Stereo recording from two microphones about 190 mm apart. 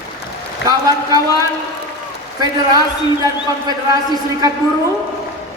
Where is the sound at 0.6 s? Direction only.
65° left (ahead or behind).